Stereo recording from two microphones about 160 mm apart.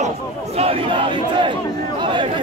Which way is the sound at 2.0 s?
30° right (ahead or behind).